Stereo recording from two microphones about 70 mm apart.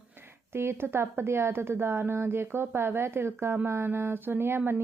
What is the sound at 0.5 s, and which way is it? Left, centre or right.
Speech, right.